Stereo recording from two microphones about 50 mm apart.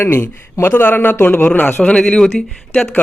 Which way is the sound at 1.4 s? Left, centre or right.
Left.